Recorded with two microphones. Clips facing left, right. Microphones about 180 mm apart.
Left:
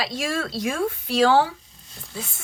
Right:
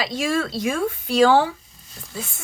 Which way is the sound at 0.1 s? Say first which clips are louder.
Right 4 dB; 55° right (ahead or behind).